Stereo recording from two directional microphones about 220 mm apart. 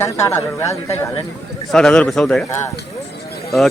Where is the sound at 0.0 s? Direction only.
10° left (ahead or behind).